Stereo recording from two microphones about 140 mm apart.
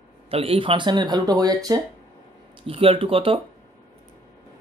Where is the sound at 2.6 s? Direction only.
40° right (ahead or behind).